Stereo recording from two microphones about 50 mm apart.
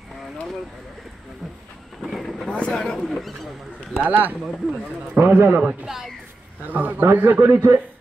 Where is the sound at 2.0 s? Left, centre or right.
Centre.